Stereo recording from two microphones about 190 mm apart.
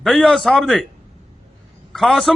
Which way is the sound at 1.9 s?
Centre (ahead or behind).